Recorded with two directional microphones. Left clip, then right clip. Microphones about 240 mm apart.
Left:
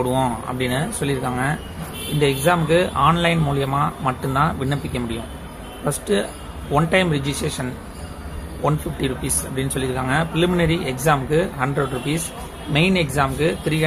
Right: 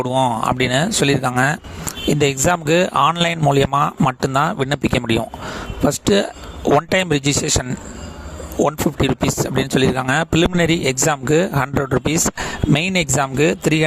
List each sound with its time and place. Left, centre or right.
0.0 s speech: right
8.6 s speech: right